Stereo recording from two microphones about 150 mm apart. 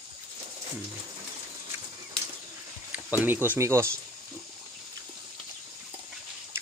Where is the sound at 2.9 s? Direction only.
10° right (ahead or behind).